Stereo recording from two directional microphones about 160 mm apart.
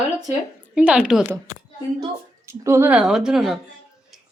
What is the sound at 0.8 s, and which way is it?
Speech, 5° right (ahead or behind).